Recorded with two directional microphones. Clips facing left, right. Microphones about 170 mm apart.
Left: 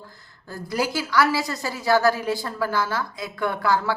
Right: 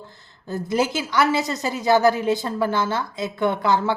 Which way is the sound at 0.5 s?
20° right (ahead or behind).